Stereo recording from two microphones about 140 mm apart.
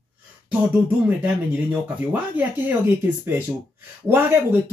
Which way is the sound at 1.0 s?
10° right (ahead or behind).